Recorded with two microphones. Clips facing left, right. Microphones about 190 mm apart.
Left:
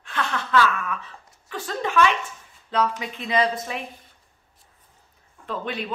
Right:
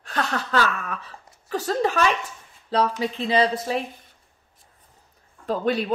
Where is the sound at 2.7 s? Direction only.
35° right (ahead or behind).